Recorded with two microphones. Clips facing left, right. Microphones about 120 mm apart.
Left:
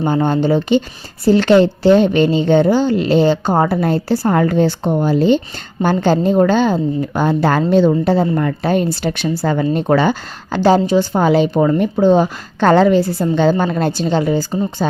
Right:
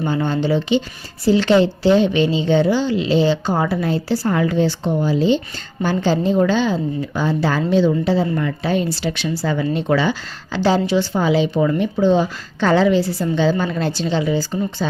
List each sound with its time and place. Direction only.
0.0 s a woman's voice: 50° left (ahead or behind)